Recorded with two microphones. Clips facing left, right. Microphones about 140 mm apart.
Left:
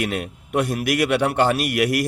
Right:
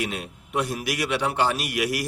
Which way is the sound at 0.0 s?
55° left (ahead or behind).